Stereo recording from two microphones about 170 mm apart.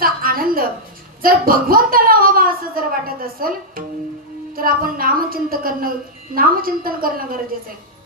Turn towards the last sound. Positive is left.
turn(degrees=-55)  # may be behind; listen again after turning